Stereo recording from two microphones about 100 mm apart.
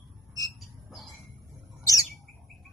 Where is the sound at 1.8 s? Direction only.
35° left (ahead or behind).